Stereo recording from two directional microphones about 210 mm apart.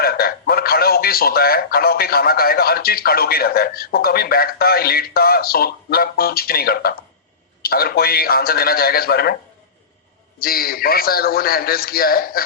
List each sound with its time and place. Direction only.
0.0 s speech: 45° left (ahead or behind)
10.4 s speech: 45° left (ahead or behind)